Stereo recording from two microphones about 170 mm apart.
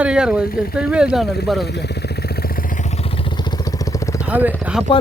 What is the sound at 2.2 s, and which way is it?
Vehicle, 60° left (ahead or behind).